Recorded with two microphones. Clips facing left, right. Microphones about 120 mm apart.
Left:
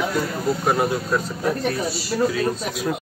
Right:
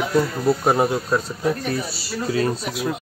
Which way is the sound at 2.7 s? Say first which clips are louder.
Even; 5° right (ahead or behind).